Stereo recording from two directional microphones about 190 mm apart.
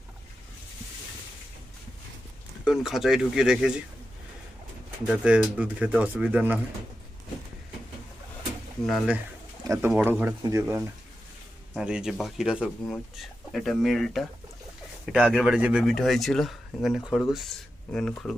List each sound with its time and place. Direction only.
2.6 s speech: centre (ahead or behind)
5.0 s speech: 5° right (ahead or behind)
8.9 s speech: 5° right (ahead or behind)
9.6 s speech: 15° right (ahead or behind)
11.7 s speech: 5° right (ahead or behind)